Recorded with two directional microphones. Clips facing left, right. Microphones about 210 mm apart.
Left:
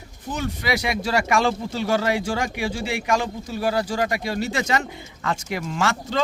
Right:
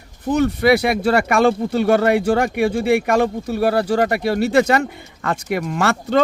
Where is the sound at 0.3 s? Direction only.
60° right (ahead or behind).